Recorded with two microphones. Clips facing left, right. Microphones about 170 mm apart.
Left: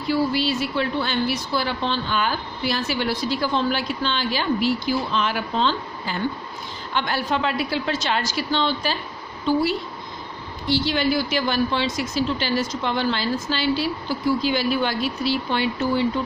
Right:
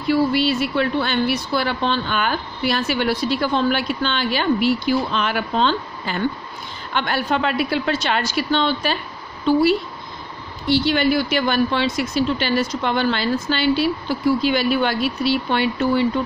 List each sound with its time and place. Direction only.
0.1 s a woman's voice: 65° right (ahead or behind)